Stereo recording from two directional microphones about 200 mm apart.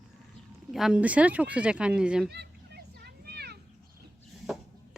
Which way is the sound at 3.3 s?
55° right (ahead or behind).